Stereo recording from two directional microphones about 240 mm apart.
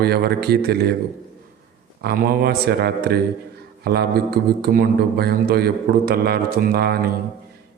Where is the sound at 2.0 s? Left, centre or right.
Right.